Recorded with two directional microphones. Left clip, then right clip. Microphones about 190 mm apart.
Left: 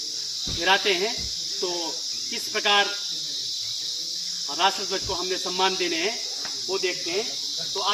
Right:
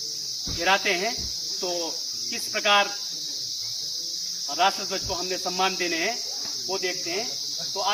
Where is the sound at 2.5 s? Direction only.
25° right (ahead or behind).